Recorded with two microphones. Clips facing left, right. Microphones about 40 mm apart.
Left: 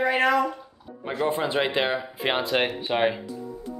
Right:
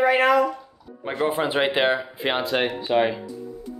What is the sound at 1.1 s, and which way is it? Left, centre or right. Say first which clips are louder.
Speech: right 2 dB; right.